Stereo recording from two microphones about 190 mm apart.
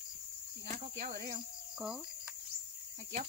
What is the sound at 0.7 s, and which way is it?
Cricket, 40° right (ahead or behind).